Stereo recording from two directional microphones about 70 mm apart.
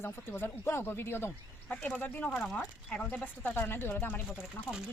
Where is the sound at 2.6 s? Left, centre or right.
Centre.